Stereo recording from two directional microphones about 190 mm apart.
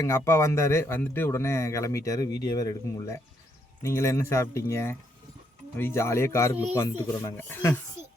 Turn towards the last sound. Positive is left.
turn(degrees=10)  # may be behind; listen again after turning